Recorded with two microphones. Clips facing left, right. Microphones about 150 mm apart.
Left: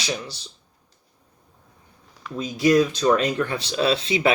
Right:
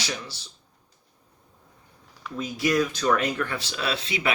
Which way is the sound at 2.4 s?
25° left (ahead or behind).